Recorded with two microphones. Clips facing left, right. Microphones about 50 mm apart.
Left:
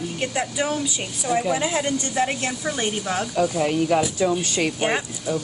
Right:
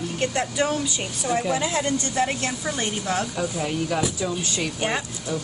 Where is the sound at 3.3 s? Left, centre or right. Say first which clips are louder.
Left 6 dB; centre.